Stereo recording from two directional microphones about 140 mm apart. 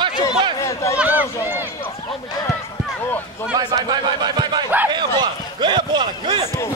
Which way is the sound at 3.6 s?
30° right (ahead or behind).